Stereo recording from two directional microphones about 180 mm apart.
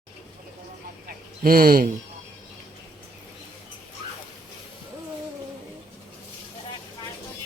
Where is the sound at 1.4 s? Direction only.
55° right (ahead or behind).